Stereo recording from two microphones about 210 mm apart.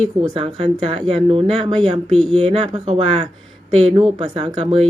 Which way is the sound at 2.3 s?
30° right (ahead or behind).